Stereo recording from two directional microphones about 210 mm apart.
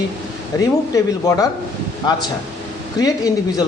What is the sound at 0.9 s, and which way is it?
Speech, 15° left (ahead or behind).